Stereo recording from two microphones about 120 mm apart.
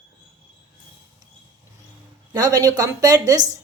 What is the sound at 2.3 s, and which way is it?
Speech, 30° right (ahead or behind).